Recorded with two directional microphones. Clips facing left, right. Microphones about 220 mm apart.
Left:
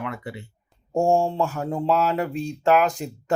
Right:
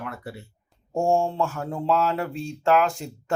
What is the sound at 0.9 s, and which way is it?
Speech, 15° left (ahead or behind).